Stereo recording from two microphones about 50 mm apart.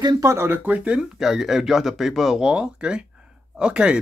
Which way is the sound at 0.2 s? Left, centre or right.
Right.